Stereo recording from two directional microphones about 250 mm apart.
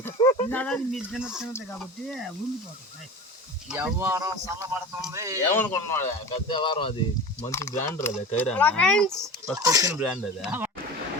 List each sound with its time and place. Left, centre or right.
0.0 s a sound: centre
0.5 s speech: centre
3.7 s speech: centre
5.5 s speech: centre
9.6 s speech: centre
10.0 s speech: centre